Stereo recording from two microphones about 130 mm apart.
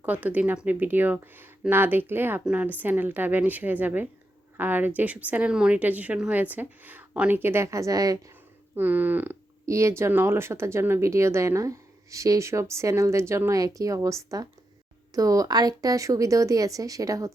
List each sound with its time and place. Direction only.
0.0 s speech: 10° right (ahead or behind)
8.7 s speech: 15° right (ahead or behind)